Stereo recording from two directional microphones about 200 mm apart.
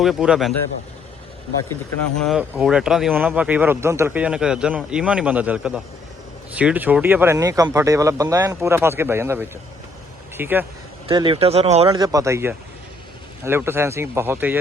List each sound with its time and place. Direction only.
0.0 s speech: 5° right (ahead or behind)
2.1 s speech: centre (ahead or behind)
11.1 s speech: 25° right (ahead or behind)